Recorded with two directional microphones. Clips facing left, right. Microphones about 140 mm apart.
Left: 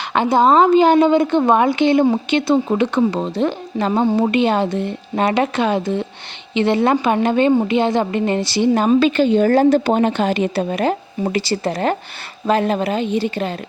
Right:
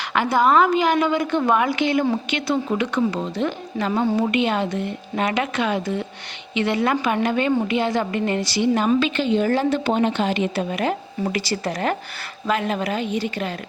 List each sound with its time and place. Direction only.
0.1 s a woman's voice: 25° left (ahead or behind)